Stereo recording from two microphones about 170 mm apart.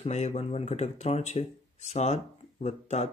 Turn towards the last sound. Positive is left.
turn(degrees=40)  # may be behind; listen again after turning